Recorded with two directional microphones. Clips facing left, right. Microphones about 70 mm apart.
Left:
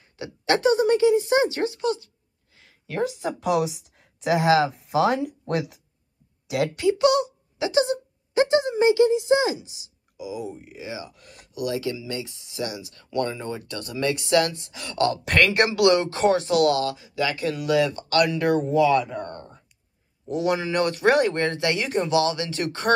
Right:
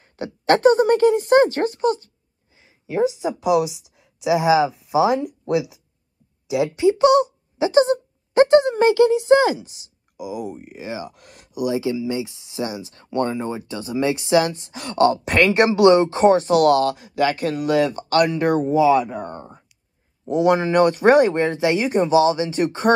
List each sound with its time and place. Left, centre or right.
0.0 s speech: right
2.5 s speech: centre; by 11.5 s right
11.5 s speech: centre
12.4 s speech: right
13.4 s speech: centre
14.5 s speech: right
18.6 s speech: centre
20.2 s speech: right
21.3 s speech: centre